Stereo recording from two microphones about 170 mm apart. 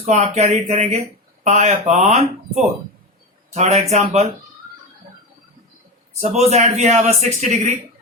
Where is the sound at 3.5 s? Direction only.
40° right (ahead or behind).